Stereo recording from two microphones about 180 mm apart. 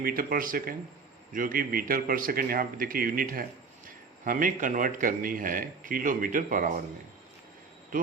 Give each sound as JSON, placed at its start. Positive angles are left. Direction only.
{"t": 0.0, "sound": "a man's voice", "side_deg": -55}